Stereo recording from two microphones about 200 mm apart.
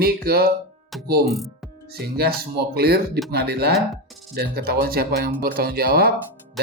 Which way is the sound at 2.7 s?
50° right (ahead or behind).